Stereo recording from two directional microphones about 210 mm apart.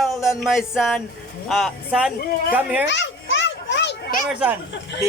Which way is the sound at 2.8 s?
60° left (ahead or behind).